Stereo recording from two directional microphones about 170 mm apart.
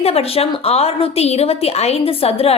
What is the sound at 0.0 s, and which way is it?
A woman's voice, 35° left (ahead or behind).